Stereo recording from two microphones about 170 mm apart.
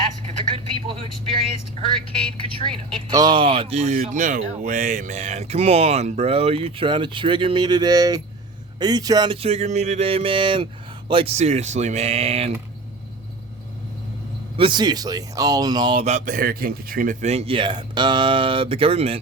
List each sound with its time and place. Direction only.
0.3 s a sound: 35° right (ahead or behind)
2.6 s speech: 30° right (ahead or behind)
3.9 s speech: 50° right (ahead or behind)
14.5 s speech: 30° right (ahead or behind)
16.0 s speech: 45° right (ahead or behind)